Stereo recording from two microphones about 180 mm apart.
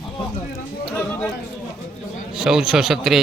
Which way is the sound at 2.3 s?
5° right (ahead or behind).